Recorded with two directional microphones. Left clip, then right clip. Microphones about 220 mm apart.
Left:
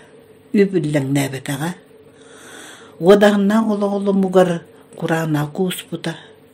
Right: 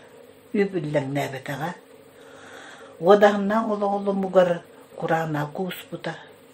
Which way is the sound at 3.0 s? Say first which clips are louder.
Left 4 dB; 50° left (ahead or behind).